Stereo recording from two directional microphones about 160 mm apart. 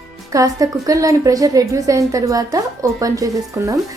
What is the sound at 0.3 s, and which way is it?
A woman's voice, 20° right (ahead or behind).